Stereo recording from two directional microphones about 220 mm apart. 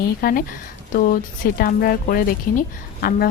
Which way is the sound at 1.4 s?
40° left (ahead or behind).